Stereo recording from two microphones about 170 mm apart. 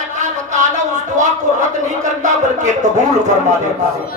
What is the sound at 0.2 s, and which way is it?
Speech, 45° right (ahead or behind).